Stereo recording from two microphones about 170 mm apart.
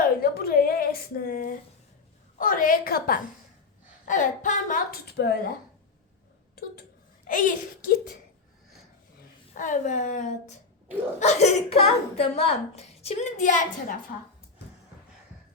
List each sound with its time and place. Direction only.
0.0 s a sound: 65° left (ahead or behind)
2.4 s a woman's voice: 50° left (ahead or behind)
4.0 s a woman's voice: 45° left (ahead or behind); by 5.5 s 70° left (ahead or behind)
7.3 s a woman's voice: 50° left (ahead or behind)
9.6 s a woman's voice: 45° left (ahead or behind)